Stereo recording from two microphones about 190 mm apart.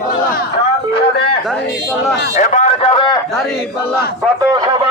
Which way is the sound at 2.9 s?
25° left (ahead or behind).